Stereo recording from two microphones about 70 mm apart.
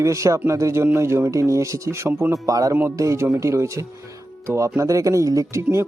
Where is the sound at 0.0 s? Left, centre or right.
Right.